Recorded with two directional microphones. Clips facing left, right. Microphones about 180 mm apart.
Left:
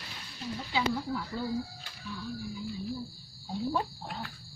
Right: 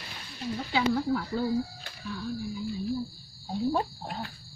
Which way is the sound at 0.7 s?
60° right (ahead or behind).